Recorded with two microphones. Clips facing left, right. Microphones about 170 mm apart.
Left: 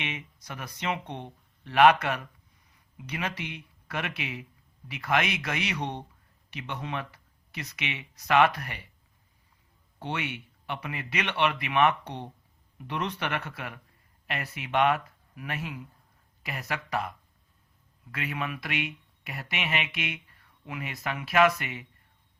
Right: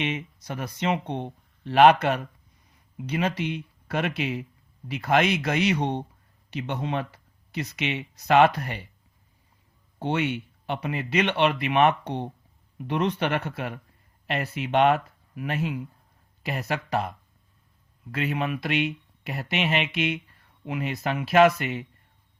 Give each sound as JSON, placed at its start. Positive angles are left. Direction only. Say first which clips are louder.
{"t": 0.0, "sound": "speech", "louder": "right 8 dB", "side_deg": -30}
{"t": 10.0, "sound": "speech", "louder": "right 8 dB", "side_deg": -25}